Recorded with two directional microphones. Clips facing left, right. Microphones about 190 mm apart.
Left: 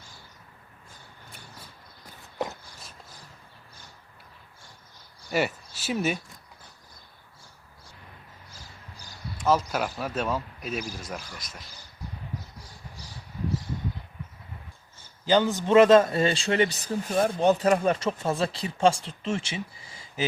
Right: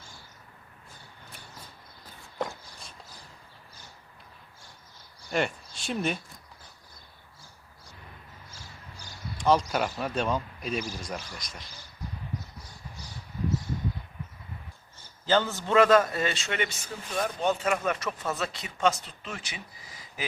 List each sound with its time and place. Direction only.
5.3 s speech: 5° left (ahead or behind)
9.4 s speech: 5° left (ahead or behind)
15.3 s a man's voice: 15° left (ahead or behind)